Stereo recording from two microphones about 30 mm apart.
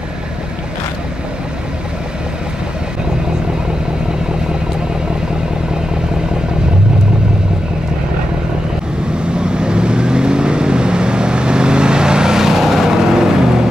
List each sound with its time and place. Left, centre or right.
9.2 s vehicle: right; by 12.9 s centre
13.1 s vehicle: right